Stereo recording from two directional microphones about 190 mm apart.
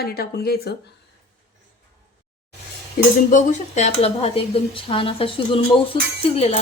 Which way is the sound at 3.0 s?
50° left (ahead or behind).